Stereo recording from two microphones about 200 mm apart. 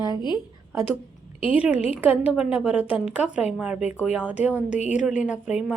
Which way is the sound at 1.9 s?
10° right (ahead or behind).